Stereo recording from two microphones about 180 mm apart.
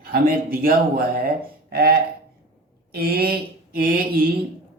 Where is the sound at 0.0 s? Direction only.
55° right (ahead or behind).